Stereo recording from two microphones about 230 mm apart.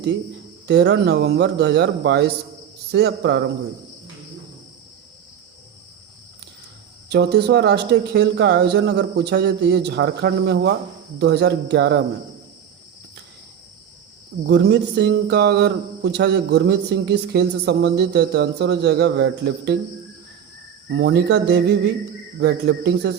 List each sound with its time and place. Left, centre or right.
0.7 s speech: right
7.1 s speech: right
14.4 s speech: right
20.9 s speech: right